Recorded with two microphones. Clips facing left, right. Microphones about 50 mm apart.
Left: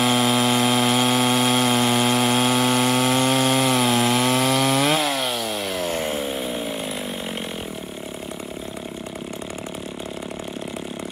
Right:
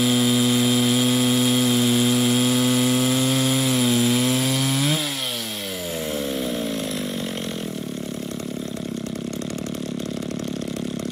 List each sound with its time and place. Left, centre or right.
0.0 s a sound: left
0.7 s power tool: left
3.4 s sawing: left
4.6 s wood: left